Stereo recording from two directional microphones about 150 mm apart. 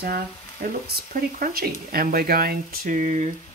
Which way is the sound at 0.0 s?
90° right.